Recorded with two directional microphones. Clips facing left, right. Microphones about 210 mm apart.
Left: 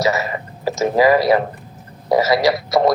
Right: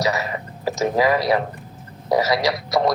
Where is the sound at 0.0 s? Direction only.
Centre (ahead or behind).